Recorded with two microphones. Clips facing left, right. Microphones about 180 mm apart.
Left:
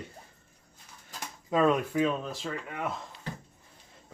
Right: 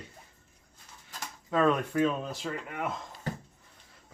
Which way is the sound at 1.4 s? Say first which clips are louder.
Left 1 dB; 15° left (ahead or behind).